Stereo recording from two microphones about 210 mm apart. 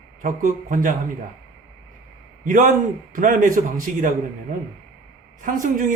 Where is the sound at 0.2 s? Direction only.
40° right (ahead or behind).